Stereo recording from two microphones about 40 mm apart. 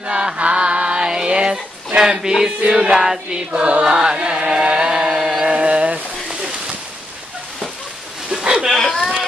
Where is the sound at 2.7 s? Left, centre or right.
Centre.